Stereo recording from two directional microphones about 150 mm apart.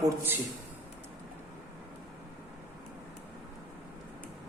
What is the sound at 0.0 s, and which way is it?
Speech, 15° right (ahead or behind).